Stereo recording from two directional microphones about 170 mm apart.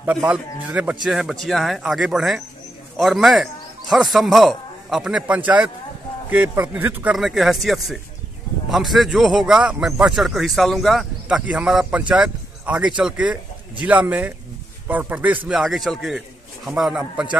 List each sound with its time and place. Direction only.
0.0 s a man's voice: 10° right (ahead or behind)